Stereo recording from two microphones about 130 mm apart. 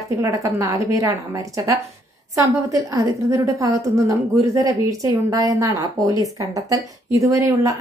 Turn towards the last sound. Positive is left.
turn(degrees=-25)  # may be behind; listen again after turning